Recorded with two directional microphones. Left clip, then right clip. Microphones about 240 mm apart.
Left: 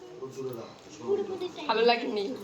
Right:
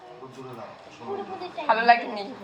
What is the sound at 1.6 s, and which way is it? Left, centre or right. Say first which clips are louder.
Speech: right 6 dB; left.